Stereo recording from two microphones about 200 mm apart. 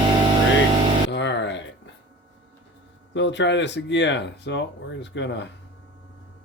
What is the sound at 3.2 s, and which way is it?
Speech, 60° left (ahead or behind).